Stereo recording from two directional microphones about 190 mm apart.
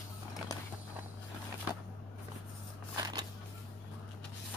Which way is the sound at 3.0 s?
20° right (ahead or behind).